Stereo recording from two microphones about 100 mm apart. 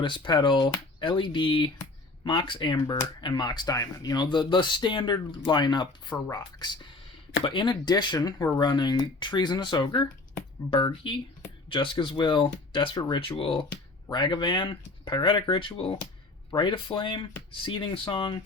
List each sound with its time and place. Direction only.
0.0 s speech: 50° left (ahead or behind)
12.9 s speech: 45° left (ahead or behind)
13.4 s speech: 65° left (ahead or behind)
14.1 s speech: 50° left (ahead or behind)